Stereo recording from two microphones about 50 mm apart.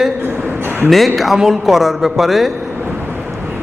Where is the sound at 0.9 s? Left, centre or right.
Centre.